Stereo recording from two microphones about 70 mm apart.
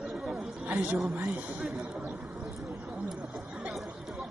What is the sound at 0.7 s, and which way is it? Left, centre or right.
Speech, right.